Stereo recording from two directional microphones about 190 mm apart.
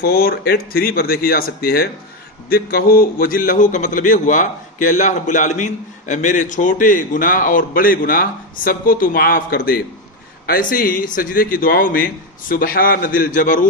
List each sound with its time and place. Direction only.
0.0 s a man's voice: 50° left (ahead or behind)